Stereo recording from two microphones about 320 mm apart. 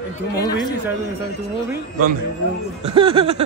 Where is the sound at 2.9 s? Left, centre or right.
Centre.